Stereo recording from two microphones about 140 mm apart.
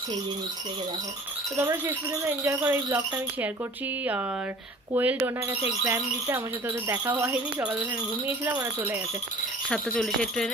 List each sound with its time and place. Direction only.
1.5 s speech: 20° right (ahead or behind)
4.9 s speech: 15° right (ahead or behind)
6.8 s speech: 20° right (ahead or behind)
9.6 s speech: 5° left (ahead or behind)